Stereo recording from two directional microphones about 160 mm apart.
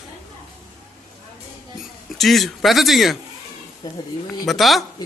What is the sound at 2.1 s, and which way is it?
Speech, centre (ahead or behind).